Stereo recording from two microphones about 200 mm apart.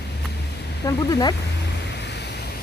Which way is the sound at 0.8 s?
20° left (ahead or behind).